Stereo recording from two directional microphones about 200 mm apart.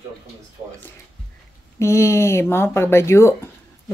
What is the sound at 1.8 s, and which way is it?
Speech, 15° left (ahead or behind).